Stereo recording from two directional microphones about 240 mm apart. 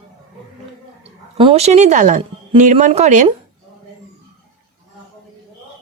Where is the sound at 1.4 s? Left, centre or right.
Right.